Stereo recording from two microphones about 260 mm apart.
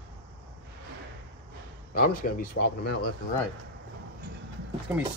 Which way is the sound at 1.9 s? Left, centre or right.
Left.